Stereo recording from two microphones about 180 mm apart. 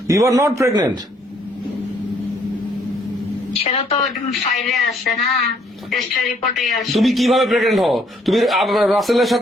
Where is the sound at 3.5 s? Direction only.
35° left (ahead or behind).